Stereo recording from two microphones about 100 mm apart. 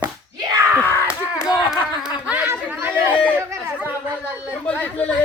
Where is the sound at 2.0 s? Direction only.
10° right (ahead or behind).